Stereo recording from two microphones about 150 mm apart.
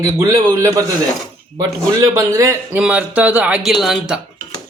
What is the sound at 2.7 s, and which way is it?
Speech, 10° right (ahead or behind).